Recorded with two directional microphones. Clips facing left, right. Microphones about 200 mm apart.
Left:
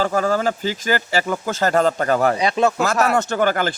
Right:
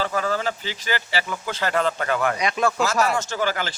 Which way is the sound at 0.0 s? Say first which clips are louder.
Left 5 dB; 45° left (ahead or behind).